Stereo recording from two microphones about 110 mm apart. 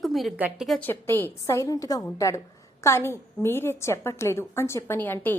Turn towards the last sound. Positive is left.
turn(degrees=20)  # may be behind; listen again after turning